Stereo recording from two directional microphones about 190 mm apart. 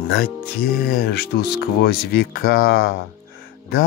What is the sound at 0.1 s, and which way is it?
Speech, 55° left (ahead or behind).